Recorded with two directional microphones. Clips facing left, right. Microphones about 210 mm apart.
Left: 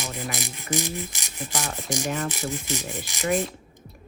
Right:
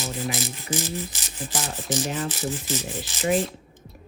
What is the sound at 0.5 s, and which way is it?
Speech, 15° left (ahead or behind).